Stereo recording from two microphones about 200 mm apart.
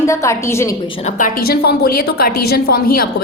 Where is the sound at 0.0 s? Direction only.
15° left (ahead or behind).